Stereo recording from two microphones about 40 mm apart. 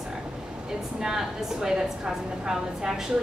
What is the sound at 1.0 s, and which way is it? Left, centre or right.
A woman's voice, centre.